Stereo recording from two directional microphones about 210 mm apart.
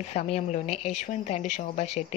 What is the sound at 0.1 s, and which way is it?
A woman's voice, 30° left (ahead or behind).